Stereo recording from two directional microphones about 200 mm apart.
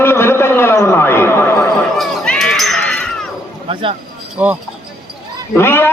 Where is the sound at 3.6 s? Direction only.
30° right (ahead or behind).